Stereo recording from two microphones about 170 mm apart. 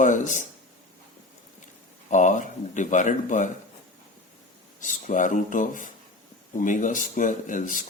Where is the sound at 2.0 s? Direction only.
45° left (ahead or behind).